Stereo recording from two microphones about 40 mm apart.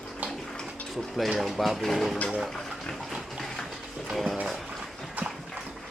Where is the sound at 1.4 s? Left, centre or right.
Centre.